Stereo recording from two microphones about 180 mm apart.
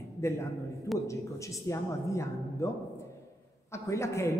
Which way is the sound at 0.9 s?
15° left (ahead or behind).